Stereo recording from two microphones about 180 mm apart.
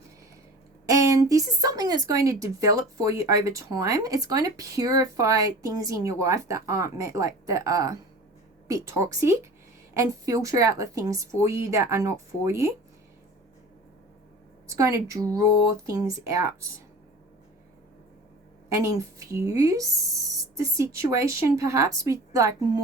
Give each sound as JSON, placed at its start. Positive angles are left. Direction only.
{"t": 0.9, "sound": "speech", "side_deg": -15}
{"t": 14.7, "sound": "speech", "side_deg": -15}
{"t": 18.9, "sound": "speech", "side_deg": -15}